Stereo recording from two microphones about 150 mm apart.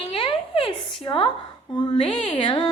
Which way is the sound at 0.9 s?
35° left (ahead or behind).